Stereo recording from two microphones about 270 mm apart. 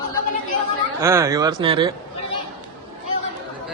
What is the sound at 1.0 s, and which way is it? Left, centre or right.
Speech, centre.